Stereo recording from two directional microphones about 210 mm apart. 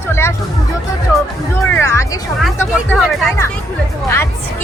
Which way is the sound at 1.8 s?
15° left (ahead or behind).